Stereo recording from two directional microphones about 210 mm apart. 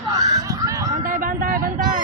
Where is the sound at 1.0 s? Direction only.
40° right (ahead or behind).